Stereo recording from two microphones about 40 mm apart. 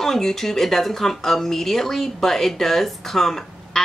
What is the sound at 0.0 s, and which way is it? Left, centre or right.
Speech, centre.